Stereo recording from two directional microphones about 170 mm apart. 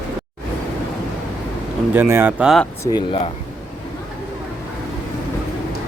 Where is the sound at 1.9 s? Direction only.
15° right (ahead or behind).